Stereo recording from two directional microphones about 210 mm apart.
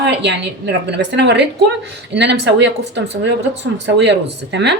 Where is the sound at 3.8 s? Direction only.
55° right (ahead or behind).